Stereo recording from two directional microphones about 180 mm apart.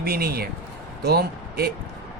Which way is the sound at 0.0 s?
55° right (ahead or behind).